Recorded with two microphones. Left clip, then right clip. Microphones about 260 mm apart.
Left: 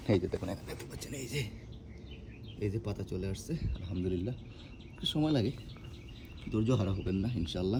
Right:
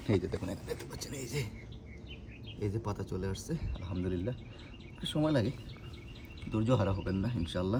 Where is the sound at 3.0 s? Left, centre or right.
Centre.